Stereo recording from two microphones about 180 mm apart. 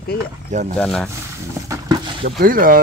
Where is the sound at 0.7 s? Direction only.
5° left (ahead or behind).